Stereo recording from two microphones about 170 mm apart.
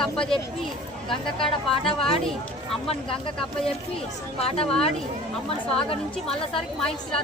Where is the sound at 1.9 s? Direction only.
30° left (ahead or behind).